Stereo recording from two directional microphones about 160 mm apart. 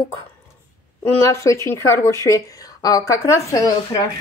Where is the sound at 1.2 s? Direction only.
20° left (ahead or behind).